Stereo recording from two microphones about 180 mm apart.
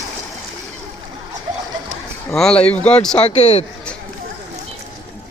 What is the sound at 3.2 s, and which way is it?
Speech, 35° left (ahead or behind).